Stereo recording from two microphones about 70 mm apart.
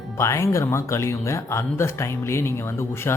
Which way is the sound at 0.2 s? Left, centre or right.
Left.